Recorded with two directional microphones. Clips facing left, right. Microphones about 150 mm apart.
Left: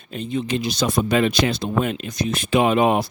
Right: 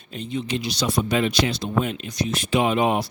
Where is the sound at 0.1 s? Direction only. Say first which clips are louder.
Left 3 dB; 50° left (ahead or behind).